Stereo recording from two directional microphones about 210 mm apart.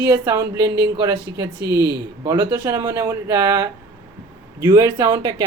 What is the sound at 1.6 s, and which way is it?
Speech, 50° right (ahead or behind).